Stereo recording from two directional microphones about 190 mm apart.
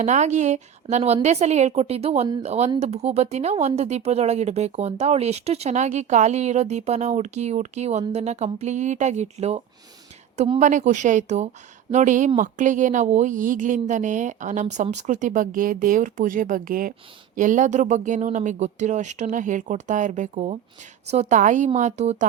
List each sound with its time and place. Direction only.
0.0 s speech: 40° right (ahead or behind)